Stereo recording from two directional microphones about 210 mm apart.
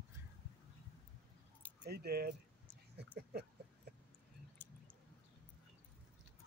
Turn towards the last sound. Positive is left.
turn(degrees=10)  # may be behind; listen again after turning